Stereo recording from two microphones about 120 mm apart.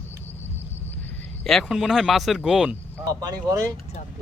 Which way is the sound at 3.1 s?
30° right (ahead or behind).